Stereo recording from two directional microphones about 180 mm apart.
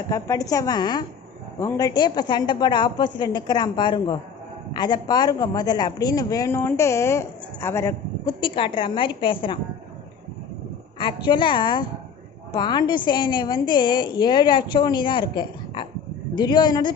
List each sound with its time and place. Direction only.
0.1 s speech: 20° left (ahead or behind)
11.0 s speech: 25° left (ahead or behind)